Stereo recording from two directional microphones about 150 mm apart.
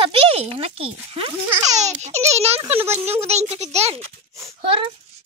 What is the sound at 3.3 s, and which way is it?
Speech, 45° right (ahead or behind).